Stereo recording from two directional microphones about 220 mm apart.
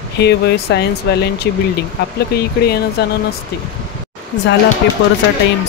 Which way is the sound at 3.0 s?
45° left (ahead or behind).